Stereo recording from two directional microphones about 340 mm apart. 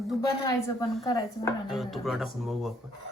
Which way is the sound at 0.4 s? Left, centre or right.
Centre.